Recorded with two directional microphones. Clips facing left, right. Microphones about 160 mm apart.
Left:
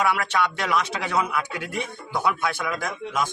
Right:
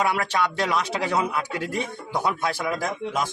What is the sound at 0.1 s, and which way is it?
A man's voice, 35° right (ahead or behind).